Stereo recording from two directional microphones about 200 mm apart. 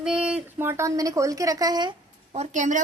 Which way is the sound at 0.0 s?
5° right (ahead or behind).